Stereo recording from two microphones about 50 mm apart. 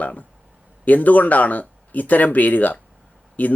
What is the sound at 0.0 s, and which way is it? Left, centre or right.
Speech, left.